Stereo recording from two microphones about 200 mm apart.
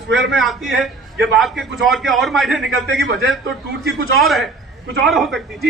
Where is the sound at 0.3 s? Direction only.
Centre (ahead or behind).